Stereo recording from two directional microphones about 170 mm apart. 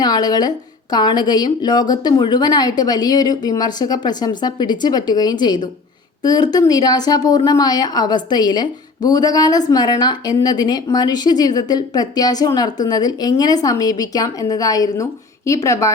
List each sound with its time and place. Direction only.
0.0 s a woman's voice: 25° left (ahead or behind)